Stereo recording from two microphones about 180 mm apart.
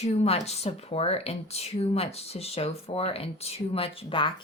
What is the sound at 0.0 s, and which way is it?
Speech, 35° left (ahead or behind).